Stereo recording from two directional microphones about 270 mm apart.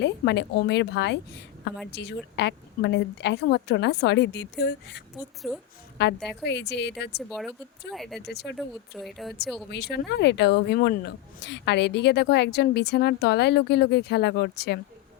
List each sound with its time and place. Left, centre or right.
0.0 s speech: left
5.4 s speech: centre
6.0 s speech: left
7.2 s speech: centre
8.3 s speech: left
8.5 s speech: centre
9.6 s speech: left